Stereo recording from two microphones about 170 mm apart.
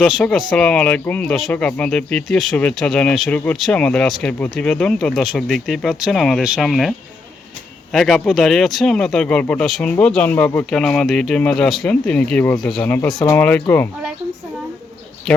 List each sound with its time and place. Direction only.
0.0 s speech: centre (ahead or behind)
7.9 s speech: centre (ahead or behind)